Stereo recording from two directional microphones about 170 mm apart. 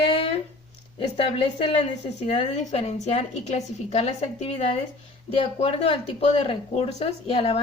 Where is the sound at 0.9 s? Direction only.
30° left (ahead or behind).